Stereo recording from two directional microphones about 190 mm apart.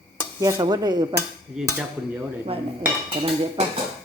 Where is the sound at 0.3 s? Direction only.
15° right (ahead or behind).